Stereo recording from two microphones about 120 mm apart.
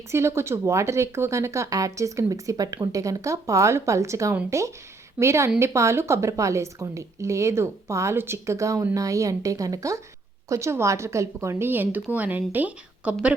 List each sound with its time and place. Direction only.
0.1 s speech: 20° right (ahead or behind)